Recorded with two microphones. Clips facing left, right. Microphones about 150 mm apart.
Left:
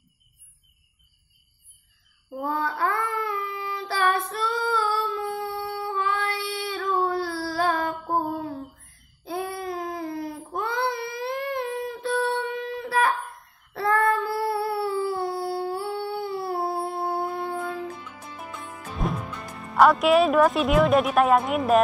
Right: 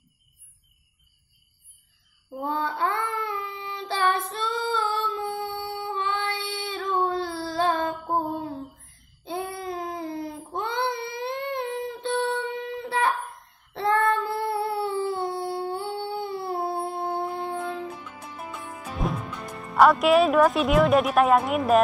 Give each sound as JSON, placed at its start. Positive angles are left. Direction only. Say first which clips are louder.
{"t": 2.3, "sound": "child singing", "louder": "left 1 dB", "side_deg": -25}
{"t": 8.7, "sound": "babbling", "louder": "right 1 dB", "side_deg": -25}
{"t": 18.6, "sound": "speech", "louder": "even", "side_deg": 0}